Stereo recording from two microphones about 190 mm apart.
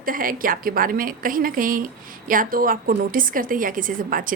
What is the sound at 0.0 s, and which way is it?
A woman's voice, 45° right (ahead or behind).